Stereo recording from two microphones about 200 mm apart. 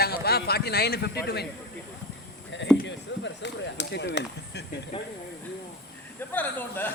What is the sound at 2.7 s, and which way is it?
Speech, 60° left (ahead or behind).